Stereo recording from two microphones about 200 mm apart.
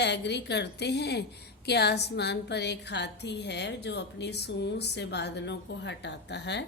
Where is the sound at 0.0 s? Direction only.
60° left (ahead or behind).